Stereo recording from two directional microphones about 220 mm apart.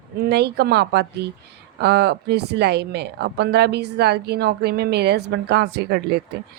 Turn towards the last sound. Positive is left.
turn(degrees=-50)  # may be behind; listen again after turning